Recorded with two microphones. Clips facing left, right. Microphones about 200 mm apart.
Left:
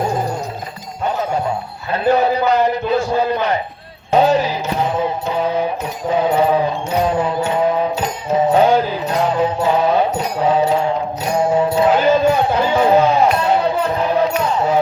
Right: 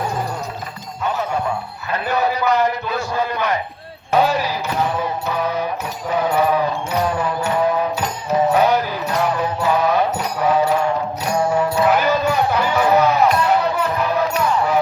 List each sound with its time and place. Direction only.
1.9 s a man's voice: 30° left (ahead or behind)
4.1 s music: 25° left (ahead or behind)